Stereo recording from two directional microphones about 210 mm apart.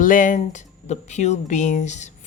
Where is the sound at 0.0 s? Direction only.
40° left (ahead or behind).